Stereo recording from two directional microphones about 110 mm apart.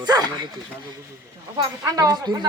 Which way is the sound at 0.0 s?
40° right (ahead or behind).